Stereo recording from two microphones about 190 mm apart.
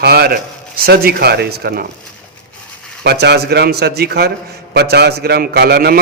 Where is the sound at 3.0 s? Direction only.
60° right (ahead or behind).